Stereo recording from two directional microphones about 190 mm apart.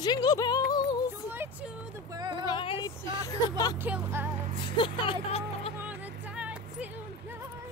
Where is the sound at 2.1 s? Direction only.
20° right (ahead or behind).